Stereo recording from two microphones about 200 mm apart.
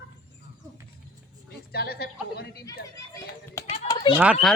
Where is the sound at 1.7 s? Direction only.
55° left (ahead or behind).